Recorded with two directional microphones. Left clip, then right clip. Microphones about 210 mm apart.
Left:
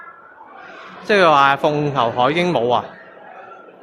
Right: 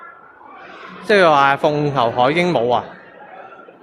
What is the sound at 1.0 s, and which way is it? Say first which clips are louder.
Speech: even; centre (ahead or behind).